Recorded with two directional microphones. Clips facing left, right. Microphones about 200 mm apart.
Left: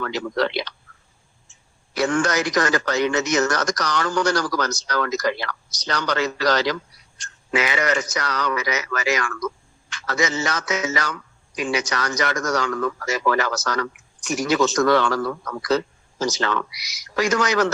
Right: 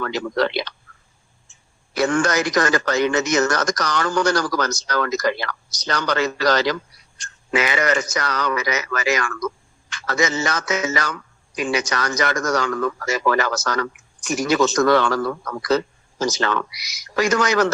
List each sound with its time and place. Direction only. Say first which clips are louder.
0.0 s speech: right 2 dB; 50° right (ahead or behind)
2.0 s speech: right 2 dB; 50° right (ahead or behind)